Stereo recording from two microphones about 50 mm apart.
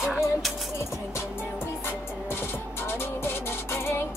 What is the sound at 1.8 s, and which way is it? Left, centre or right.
Music, left.